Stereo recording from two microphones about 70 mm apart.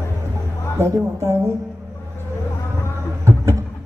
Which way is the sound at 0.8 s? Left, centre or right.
Right.